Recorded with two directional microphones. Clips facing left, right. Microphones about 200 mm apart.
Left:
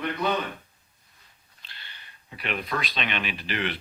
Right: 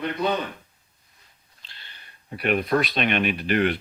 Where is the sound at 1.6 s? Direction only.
30° right (ahead or behind).